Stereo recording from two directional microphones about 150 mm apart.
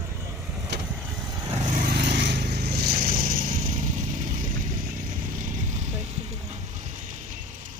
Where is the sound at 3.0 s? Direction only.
70° right (ahead or behind).